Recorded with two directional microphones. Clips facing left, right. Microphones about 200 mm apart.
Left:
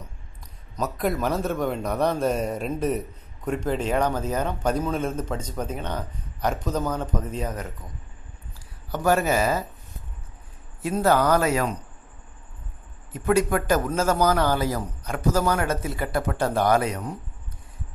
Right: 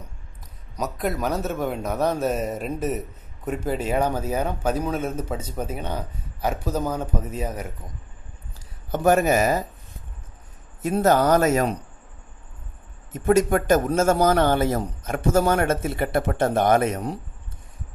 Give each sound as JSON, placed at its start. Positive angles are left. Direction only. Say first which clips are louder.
{"t": 0.7, "sound": "a man's voice", "louder": "left 1 dB", "side_deg": 0}
{"t": 8.9, "sound": "a man's voice", "louder": "right 3 dB", "side_deg": -20}
{"t": 11.0, "sound": "speech", "louder": "right 2 dB", "side_deg": -20}
{"t": 11.3, "sound": "a man's voice", "louder": "right 3 dB", "side_deg": -45}
{"t": 13.3, "sound": "a man's voice", "louder": "right 3 dB", "side_deg": -45}
{"t": 13.8, "sound": "speech", "louder": "right 3 dB", "side_deg": -25}
{"t": 16.9, "sound": "speech", "louder": "right 4 dB", "side_deg": -35}